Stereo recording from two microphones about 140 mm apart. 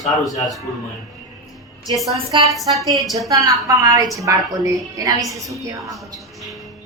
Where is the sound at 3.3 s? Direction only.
25° right (ahead or behind).